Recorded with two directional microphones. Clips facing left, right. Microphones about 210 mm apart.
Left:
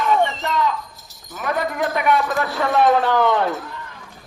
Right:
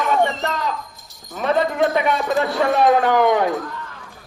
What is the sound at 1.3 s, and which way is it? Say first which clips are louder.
Speech: right 4 dB; 25° right (ahead or behind).